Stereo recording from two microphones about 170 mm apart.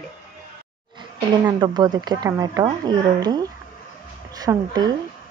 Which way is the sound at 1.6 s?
25° right (ahead or behind).